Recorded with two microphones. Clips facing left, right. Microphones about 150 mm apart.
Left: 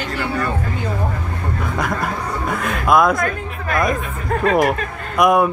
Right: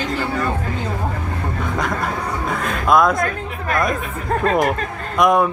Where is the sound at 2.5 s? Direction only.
5° left (ahead or behind).